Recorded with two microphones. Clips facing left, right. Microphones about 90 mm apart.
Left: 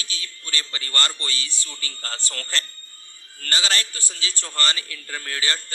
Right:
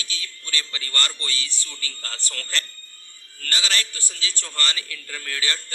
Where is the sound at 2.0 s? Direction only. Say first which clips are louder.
Left 5 dB; 25° left (ahead or behind).